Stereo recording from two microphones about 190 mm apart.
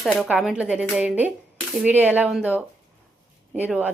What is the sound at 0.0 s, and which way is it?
A woman's voice, centre (ahead or behind).